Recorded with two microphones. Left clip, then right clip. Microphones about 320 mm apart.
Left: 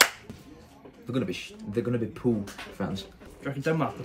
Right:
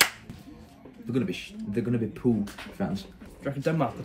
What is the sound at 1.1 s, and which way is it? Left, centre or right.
Speech, centre.